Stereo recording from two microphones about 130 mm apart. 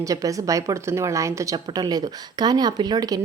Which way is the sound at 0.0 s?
25° right (ahead or behind).